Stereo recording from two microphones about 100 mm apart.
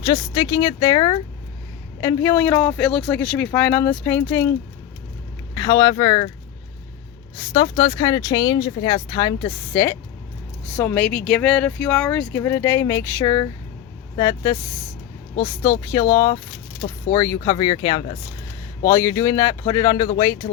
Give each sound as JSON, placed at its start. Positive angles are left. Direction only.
{"t": 0.0, "sound": "speech", "side_deg": 40}
{"t": 2.0, "sound": "speech", "side_deg": 30}
{"t": 5.5, "sound": "speech", "side_deg": 40}
{"t": 7.5, "sound": "speech", "side_deg": 45}
{"t": 9.7, "sound": "speech", "side_deg": 25}
{"t": 10.8, "sound": "speech", "side_deg": 15}
{"t": 18.9, "sound": "speech", "side_deg": 30}